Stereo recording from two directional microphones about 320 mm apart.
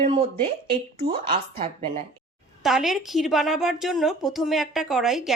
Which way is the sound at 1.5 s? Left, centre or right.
Centre.